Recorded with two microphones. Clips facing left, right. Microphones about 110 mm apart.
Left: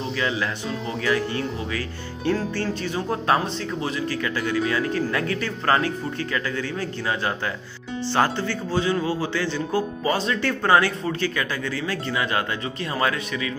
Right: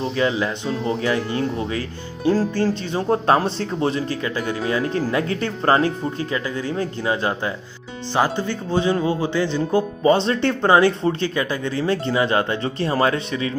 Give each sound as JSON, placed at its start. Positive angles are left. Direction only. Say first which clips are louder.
{"t": 0.1, "sound": "speech", "louder": "right 3 dB", "side_deg": -30}